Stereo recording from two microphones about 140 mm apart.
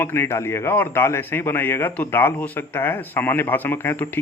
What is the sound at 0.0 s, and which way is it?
Speech, 20° left (ahead or behind).